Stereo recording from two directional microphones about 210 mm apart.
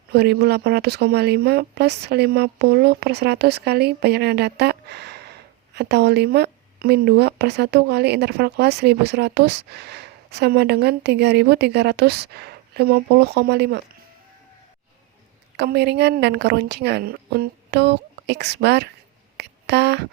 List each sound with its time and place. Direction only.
0.1 s speech: 50° right (ahead or behind)
15.5 s speech: 55° right (ahead or behind)
19.4 s a sound: 55° right (ahead or behind)